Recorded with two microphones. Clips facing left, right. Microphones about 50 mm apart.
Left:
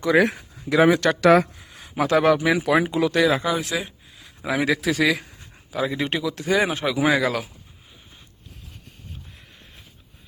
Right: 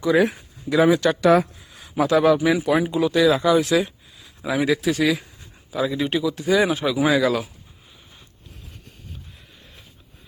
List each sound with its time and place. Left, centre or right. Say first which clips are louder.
0.0 s speech: even; left
0.8 s speech: even; left
2.7 s speech: even; left
3.2 s speech: right 5 dB; left
4.2 s a sound: right 1 dB; left
4.6 s speech: right 1 dB; left
5.7 s speech: right 2 dB; left
6.0 s speech: right 2 dB; left
6.5 s speech: right 2 dB; left
6.7 s speech: right 1 dB; left
7.0 s speech: right 1 dB; left